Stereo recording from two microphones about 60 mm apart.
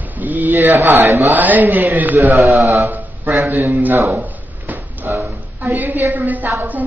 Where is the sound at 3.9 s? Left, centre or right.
Right.